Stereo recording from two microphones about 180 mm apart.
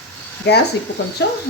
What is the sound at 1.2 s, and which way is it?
Speech, 75° left (ahead or behind).